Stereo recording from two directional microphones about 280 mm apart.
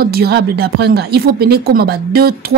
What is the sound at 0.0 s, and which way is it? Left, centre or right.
Speech, right.